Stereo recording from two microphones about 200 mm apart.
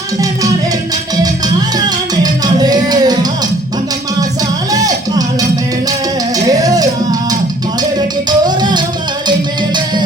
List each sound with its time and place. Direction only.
2.2 s music: 20° right (ahead or behind)
4.7 s music: 20° right (ahead or behind)